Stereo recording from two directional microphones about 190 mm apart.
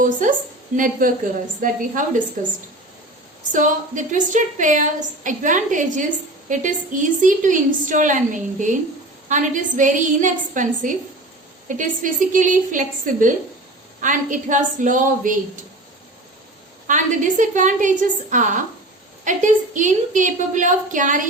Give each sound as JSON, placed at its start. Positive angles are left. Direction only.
{"t": 0.0, "sound": "a woman's voice", "side_deg": -45}
{"t": 3.5, "sound": "a woman's voice", "side_deg": -40}
{"t": 16.8, "sound": "a woman's voice", "side_deg": -40}